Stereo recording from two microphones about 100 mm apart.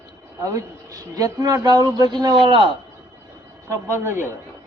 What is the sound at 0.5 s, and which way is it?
A man's voice, 35° right (ahead or behind).